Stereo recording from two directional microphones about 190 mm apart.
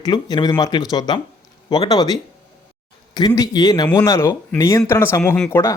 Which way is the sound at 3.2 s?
20° left (ahead or behind).